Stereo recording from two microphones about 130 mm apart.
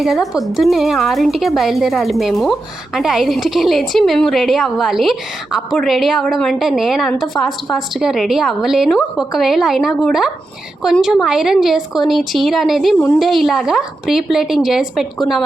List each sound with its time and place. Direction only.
0.0 s a woman's voice: centre (ahead or behind)